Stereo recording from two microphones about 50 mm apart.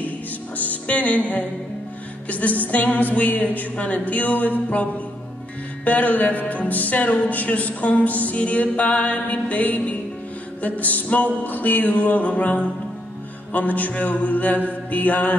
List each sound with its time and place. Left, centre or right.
0.6 s music: left
5.9 s music: left